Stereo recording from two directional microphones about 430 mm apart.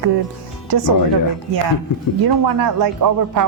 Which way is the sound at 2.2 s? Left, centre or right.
Right.